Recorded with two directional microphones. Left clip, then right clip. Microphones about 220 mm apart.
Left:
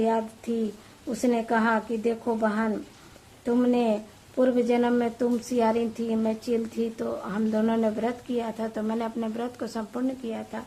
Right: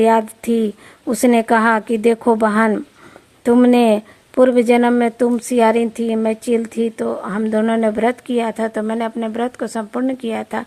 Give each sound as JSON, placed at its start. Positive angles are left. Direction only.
{"t": 0.0, "sound": "a woman's voice", "side_deg": -40}